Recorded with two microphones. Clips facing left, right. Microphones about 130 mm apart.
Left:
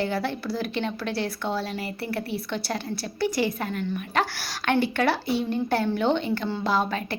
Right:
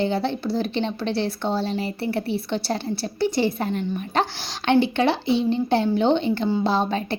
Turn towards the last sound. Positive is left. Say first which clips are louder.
# right 3 dB
turn(degrees=-30)  # may be behind; listen again after turning